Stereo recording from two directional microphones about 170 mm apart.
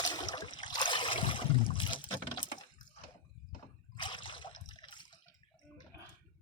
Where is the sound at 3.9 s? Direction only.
25° left (ahead or behind).